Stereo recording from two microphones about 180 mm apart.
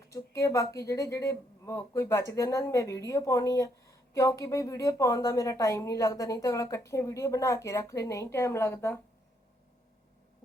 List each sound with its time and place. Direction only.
0.1 s a woman's voice: 15° left (ahead or behind)